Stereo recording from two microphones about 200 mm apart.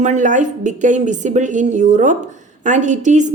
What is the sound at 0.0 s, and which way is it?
A woman's voice, 40° right (ahead or behind).